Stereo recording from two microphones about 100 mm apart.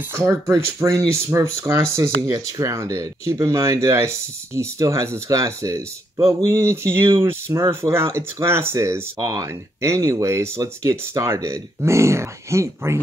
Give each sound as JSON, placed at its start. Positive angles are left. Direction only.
{"t": 0.1, "sound": "speech", "side_deg": -30}
{"t": 9.2, "sound": "speech", "side_deg": -40}
{"t": 9.5, "sound": "speech", "side_deg": -30}